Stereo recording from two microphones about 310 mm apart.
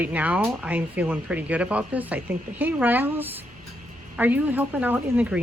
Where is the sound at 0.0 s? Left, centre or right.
Centre.